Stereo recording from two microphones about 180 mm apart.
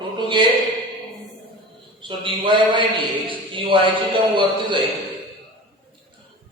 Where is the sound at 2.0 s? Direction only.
25° right (ahead or behind).